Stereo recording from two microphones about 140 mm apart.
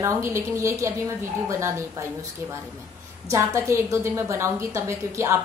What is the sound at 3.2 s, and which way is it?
A woman's voice, 20° right (ahead or behind).